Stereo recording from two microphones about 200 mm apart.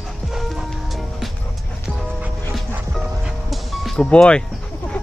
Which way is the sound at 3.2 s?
Centre (ahead or behind).